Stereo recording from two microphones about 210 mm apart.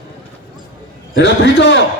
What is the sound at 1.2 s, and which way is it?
Speech, 60° left (ahead or behind).